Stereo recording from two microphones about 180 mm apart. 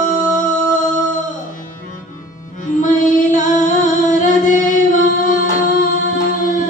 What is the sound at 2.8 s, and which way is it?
Music, 45° left (ahead or behind).